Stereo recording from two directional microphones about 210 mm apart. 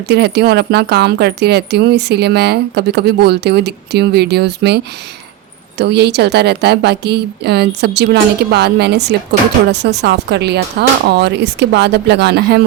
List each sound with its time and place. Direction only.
0.1 s speech: 50° right (ahead or behind)